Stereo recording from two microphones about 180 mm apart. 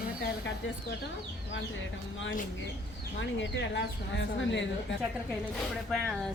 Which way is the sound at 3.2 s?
90° left.